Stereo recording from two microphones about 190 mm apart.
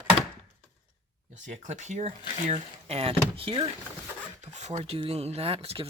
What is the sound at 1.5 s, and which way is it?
Speech, 40° right (ahead or behind).